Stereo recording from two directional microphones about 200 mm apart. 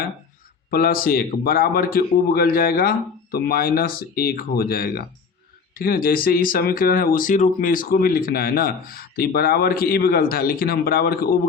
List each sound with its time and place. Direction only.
0.7 s speech: 45° left (ahead or behind)